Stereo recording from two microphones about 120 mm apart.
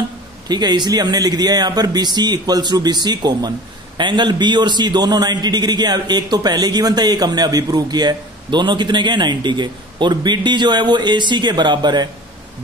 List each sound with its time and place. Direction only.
0.5 s a man's voice: 35° right (ahead or behind)